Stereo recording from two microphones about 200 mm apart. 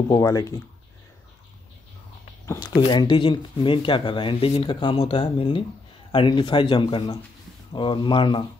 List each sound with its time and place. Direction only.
0.1 s speech: 20° left (ahead or behind)
2.9 s speech: 20° left (ahead or behind)